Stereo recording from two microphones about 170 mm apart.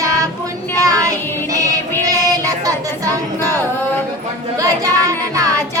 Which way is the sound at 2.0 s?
20° right (ahead or behind).